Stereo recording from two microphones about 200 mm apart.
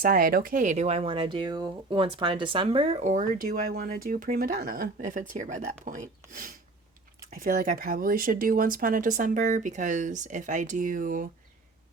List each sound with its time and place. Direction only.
0.0 s speech: 45° right (ahead or behind)